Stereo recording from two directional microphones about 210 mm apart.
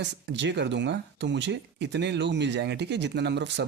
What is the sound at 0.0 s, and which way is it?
Speech, 55° right (ahead or behind).